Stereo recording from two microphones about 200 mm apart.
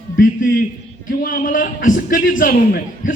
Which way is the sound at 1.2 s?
45° left (ahead or behind).